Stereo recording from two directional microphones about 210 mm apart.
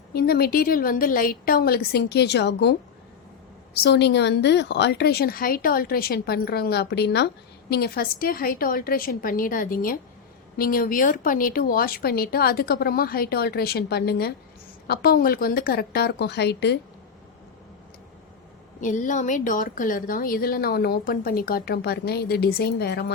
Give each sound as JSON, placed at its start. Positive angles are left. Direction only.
{"t": 0.1, "sound": "a woman's voice", "side_deg": 45}
{"t": 3.8, "sound": "a woman's voice", "side_deg": 55}
{"t": 18.8, "sound": "a woman's voice", "side_deg": 35}